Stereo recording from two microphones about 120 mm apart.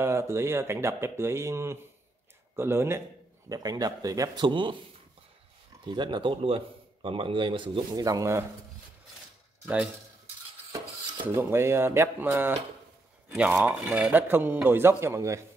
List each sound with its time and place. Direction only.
0.0 s speech: 20° right (ahead or behind)
3.4 s a man's voice: 30° right (ahead or behind)
5.9 s a man's voice: 40° right (ahead or behind)
8.0 s speech: 30° right (ahead or behind)
11.3 s speech: 20° right (ahead or behind)
13.7 s a man's voice: 10° right (ahead or behind); by 15.4 s 25° right (ahead or behind)